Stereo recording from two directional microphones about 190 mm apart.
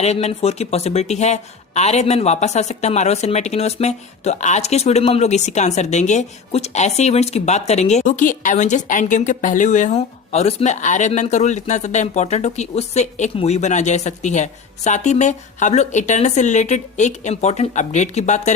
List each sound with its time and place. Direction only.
0.0 s speech: 35° left (ahead or behind)